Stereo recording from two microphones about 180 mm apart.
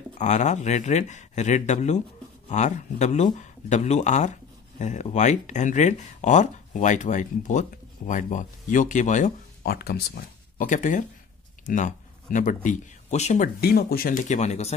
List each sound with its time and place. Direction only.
0.2 s speech: 40° left (ahead or behind)
9.7 s speech: 60° left (ahead or behind); by 13.5 s 40° left (ahead or behind)
13.6 s speech: 60° left (ahead or behind); by 14.8 s 35° left (ahead or behind)